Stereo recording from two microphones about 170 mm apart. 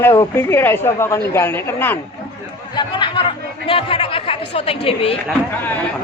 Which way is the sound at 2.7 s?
30° left (ahead or behind).